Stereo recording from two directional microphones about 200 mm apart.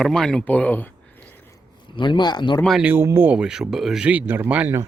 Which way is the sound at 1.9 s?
25° left (ahead or behind).